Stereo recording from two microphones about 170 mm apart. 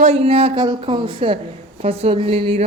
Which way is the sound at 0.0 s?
35° right (ahead or behind).